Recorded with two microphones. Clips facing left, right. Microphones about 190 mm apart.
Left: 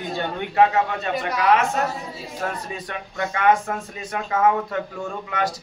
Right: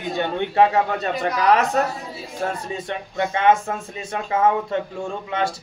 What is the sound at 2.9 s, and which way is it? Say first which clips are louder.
Speech: right 4 dB; 25° right (ahead or behind).